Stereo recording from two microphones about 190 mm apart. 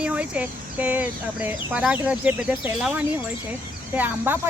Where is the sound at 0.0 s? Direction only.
5° right (ahead or behind).